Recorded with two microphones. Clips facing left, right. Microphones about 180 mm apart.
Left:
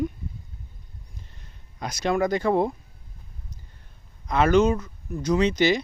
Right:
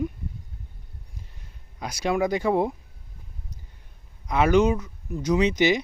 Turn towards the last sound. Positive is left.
turn(degrees=-15)  # may be behind; listen again after turning